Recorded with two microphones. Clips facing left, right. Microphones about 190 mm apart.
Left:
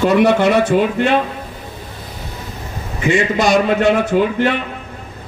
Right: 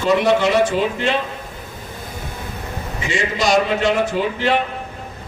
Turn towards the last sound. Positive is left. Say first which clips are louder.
# left 5 dB
turn(degrees=55)  # may be behind; listen again after turning